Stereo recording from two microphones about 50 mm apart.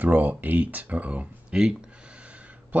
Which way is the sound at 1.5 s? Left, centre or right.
Centre.